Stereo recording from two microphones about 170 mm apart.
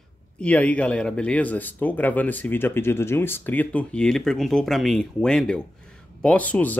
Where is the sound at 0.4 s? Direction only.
5° left (ahead or behind).